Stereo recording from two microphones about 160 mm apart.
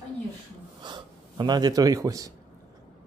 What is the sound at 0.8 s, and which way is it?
Speech, 25° right (ahead or behind).